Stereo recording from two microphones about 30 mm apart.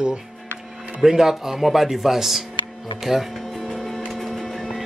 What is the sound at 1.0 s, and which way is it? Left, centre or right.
Speech, centre.